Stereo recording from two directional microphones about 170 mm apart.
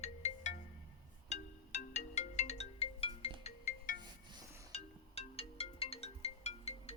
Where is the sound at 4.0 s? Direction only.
25° right (ahead or behind).